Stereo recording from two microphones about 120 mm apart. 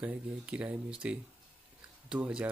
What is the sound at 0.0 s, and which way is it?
Speech, 10° right (ahead or behind).